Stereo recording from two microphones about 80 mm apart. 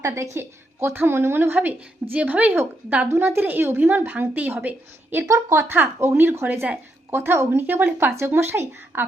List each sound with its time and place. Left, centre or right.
0.0 s a woman's voice: right
5.3 s a woman's voice: right
5.7 s a woman's voice: right